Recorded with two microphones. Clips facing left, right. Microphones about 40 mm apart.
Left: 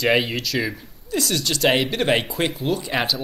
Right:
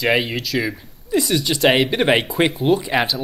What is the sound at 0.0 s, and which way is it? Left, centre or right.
Speech, centre.